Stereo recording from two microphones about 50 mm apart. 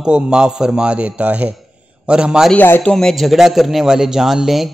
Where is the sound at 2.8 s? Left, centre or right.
Centre.